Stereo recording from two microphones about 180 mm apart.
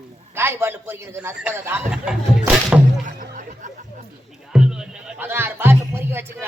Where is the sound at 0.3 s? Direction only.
15° right (ahead or behind).